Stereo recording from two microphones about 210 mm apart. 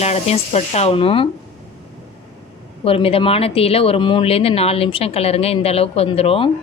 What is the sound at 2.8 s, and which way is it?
Speech, 25° left (ahead or behind).